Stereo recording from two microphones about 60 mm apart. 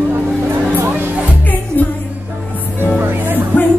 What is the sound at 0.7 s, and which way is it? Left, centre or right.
Music, right.